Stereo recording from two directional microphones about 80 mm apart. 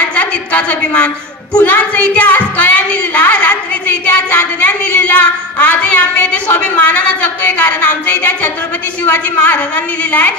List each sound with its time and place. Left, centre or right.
0.1 s a woman's voice: centre
9.0 s a woman's voice: left